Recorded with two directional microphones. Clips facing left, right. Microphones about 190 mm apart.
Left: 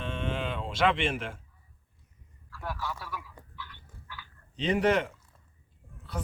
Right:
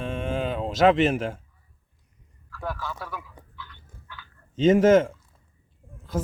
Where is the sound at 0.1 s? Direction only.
45° right (ahead or behind).